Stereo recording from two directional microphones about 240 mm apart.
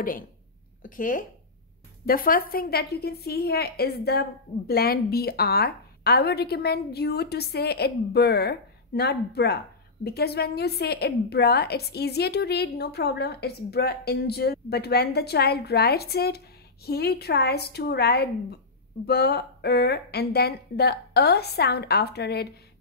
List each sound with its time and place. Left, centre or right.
0.8 s a woman's voice: left